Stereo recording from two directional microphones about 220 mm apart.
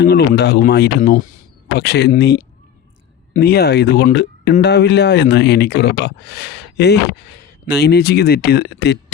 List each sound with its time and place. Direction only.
0.0 s speech: 45° left (ahead or behind)